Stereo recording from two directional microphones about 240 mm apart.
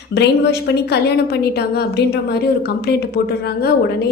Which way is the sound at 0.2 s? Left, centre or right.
Left.